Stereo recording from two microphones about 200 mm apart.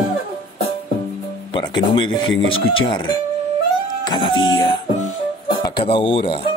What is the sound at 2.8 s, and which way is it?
Speech, 20° left (ahead or behind).